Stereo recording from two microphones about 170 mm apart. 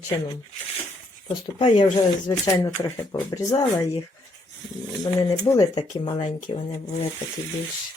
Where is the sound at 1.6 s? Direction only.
30° left (ahead or behind).